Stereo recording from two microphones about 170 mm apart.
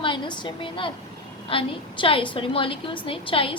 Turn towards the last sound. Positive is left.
turn(degrees=30)  # may be behind; listen again after turning